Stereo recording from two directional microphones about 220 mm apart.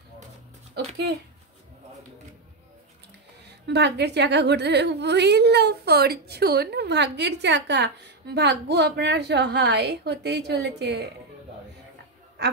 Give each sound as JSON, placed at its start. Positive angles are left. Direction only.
{"t": 0.8, "sound": "a woman's voice", "side_deg": -50}
{"t": 3.4, "sound": "a woman's voice", "side_deg": -50}